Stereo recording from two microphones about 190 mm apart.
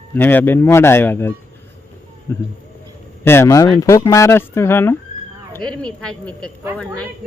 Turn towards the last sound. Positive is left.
turn(degrees=5)  # may be behind; listen again after turning